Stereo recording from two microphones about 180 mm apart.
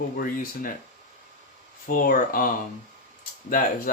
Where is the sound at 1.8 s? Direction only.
50° left (ahead or behind).